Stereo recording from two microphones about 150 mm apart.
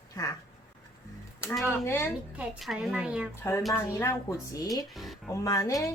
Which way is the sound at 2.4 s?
Centre (ahead or behind).